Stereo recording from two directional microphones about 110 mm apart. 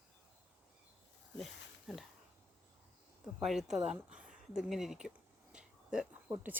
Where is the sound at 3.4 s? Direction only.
5° right (ahead or behind).